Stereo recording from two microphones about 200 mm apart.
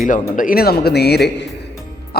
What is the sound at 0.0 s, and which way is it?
A man's voice, 40° left (ahead or behind).